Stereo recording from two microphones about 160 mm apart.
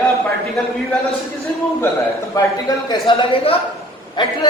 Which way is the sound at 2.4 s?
20° left (ahead or behind).